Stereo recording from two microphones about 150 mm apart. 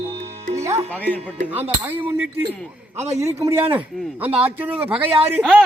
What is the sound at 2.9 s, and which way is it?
Speech, 50° right (ahead or behind).